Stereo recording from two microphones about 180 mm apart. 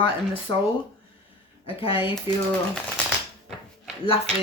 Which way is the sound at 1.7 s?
30° left (ahead or behind).